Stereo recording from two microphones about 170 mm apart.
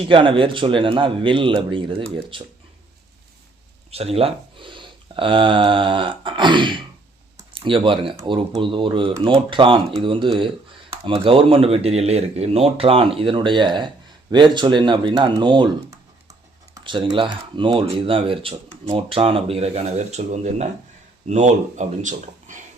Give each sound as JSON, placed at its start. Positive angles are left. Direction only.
{"t": 0.0, "sound": "speech", "side_deg": -30}
{"t": 3.9, "sound": "speech", "side_deg": -35}
{"t": 7.3, "sound": "typing", "side_deg": -30}
{"t": 8.1, "sound": "speech", "side_deg": -25}
{"t": 16.7, "sound": "speech", "side_deg": -30}